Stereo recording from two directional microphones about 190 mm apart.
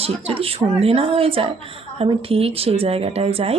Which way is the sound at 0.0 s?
30° right (ahead or behind).